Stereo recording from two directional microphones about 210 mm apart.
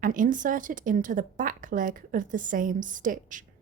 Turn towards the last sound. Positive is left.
turn(degrees=-40)  # may be behind; listen again after turning